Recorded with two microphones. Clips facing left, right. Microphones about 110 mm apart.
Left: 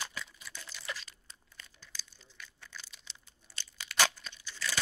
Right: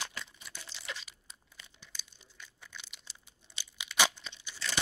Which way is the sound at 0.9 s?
5° right (ahead or behind).